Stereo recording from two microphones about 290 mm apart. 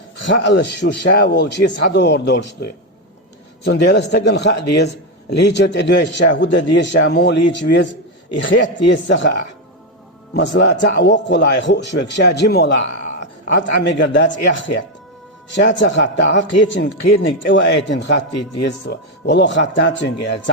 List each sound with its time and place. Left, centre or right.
0.3 s a man's voice: left